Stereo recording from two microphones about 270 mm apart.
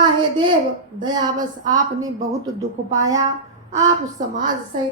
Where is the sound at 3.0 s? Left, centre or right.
Centre.